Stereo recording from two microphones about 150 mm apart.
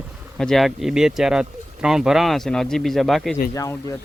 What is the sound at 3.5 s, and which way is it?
Speech, 20° left (ahead or behind).